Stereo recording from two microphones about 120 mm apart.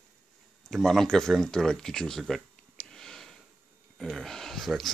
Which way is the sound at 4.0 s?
Centre (ahead or behind).